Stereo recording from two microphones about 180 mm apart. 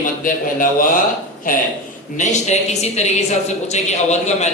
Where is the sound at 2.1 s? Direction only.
40° left (ahead or behind).